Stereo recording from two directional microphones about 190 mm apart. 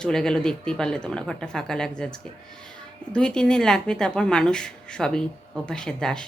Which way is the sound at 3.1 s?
5° left (ahead or behind).